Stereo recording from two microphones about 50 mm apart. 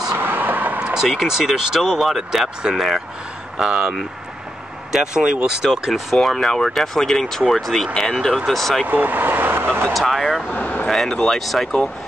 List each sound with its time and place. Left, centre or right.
0.1 s vehicle: right
0.9 s speech: centre
3.5 s speech: centre
4.9 s speech: centre
5.7 s speech: centre
8.0 s vehicle: centre
8.5 s speech: centre
8.8 s speech: right
9.9 s speech: centre
10.5 s a sound: left
10.9 s speech: centre